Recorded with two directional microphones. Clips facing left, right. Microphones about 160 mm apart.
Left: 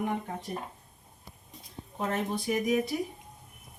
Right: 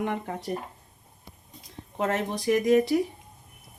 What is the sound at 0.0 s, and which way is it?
Speech, 85° right.